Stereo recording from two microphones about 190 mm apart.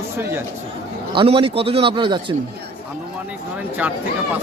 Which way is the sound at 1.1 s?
30° right (ahead or behind).